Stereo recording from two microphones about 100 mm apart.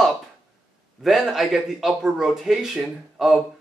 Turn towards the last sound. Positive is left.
turn(degrees=-5)  # may be behind; listen again after turning